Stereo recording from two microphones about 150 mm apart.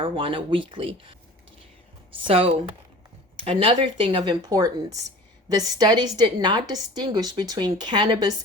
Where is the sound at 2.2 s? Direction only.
35° right (ahead or behind).